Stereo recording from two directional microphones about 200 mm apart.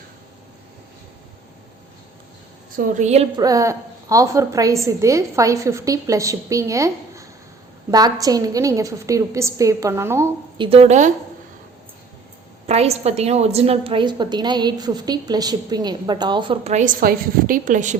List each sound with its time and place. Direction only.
2.7 s speech: 40° right (ahead or behind)
3.3 s a woman's voice: 15° right (ahead or behind)
10.6 s speech: 30° right (ahead or behind)
12.6 s a woman's voice: 30° right (ahead or behind)